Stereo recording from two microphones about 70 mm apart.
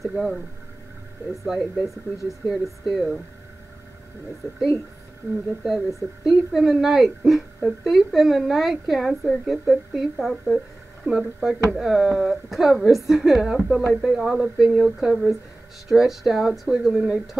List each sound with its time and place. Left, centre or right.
0.0 s a woman's voice: centre
5.6 s a woman's voice: centre